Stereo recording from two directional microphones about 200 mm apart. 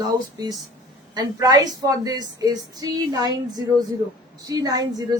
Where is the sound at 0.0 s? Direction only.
20° right (ahead or behind).